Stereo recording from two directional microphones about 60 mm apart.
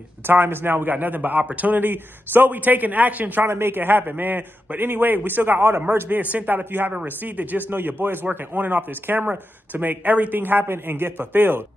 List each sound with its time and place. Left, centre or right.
0.3 s a man's voice: right
6.9 s a man's voice: right